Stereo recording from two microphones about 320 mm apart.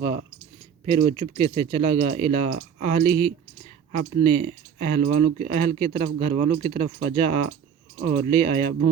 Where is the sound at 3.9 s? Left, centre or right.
Right.